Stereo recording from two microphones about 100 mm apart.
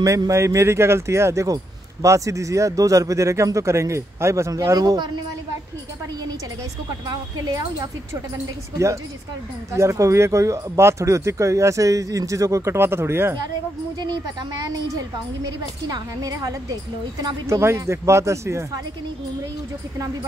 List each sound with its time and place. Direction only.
0.0 s speech: 35° right (ahead or behind)
4.7 s speech: 45° right (ahead or behind)
7.1 s speech: 45° right (ahead or behind)
8.7 s speech: 30° right (ahead or behind)
14.7 s speech: 40° right (ahead or behind)
17.5 s speech: 25° right (ahead or behind)